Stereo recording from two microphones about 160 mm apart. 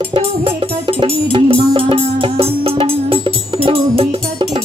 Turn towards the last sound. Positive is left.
turn(degrees=-40)  # may be behind; listen again after turning